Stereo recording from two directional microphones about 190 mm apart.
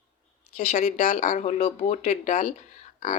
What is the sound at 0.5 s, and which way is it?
Speech, 40° left (ahead or behind).